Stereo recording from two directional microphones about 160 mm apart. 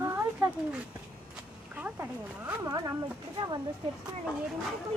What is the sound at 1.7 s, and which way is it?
Speech, 10° right (ahead or behind).